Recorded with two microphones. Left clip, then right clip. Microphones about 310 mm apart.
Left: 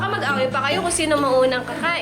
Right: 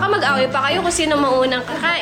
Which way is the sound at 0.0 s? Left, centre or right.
Centre.